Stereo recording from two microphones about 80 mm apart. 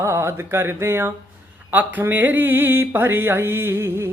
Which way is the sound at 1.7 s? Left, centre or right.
Right.